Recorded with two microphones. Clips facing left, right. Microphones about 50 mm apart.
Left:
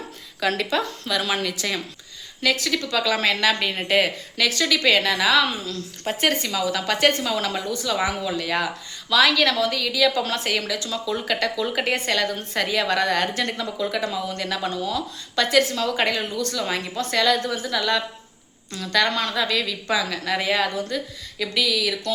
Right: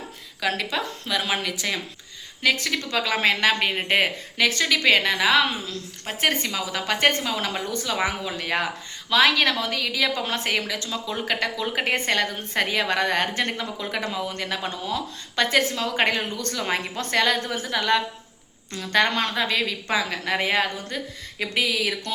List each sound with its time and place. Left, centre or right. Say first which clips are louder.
0.3 s speech: left 3 dB; centre
2.4 s speech: left 1 dB; right
6.1 s a woman's voice: left 6 dB; centre
6.4 s speech: left 3 dB; centre
7.7 s a woman's voice: left 2 dB; right
8.3 s a woman's voice: left 2 dB; right